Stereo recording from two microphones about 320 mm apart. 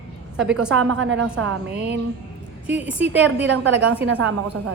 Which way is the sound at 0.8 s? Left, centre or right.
Right.